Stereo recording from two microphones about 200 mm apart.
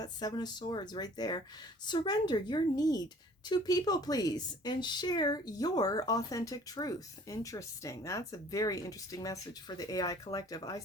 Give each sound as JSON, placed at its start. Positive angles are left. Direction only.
{"t": 0.0, "sound": "a woman's voice", "side_deg": 20}